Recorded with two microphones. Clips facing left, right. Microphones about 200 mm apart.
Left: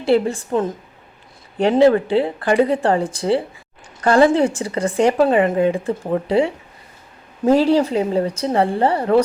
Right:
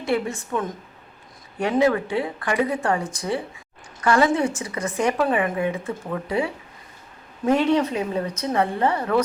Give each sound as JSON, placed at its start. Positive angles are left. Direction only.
{"t": 0.0, "sound": "speech", "side_deg": 30}